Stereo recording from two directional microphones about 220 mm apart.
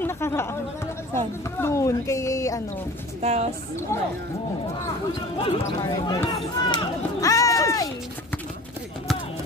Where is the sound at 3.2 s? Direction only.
30° right (ahead or behind).